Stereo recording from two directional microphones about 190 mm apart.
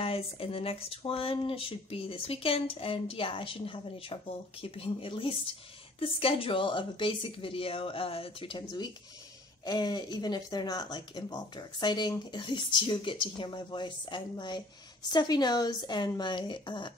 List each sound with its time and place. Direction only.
0.0 s speech: 30° left (ahead or behind)